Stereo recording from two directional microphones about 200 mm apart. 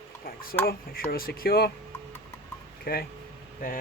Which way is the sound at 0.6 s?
50° left (ahead or behind).